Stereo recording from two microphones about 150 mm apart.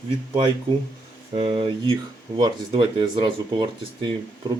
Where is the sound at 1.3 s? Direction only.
40° right (ahead or behind).